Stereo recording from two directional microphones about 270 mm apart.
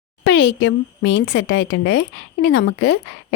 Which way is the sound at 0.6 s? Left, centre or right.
Left.